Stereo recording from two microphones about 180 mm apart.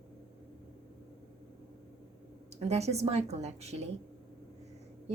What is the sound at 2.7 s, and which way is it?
A woman's voice, 35° right (ahead or behind).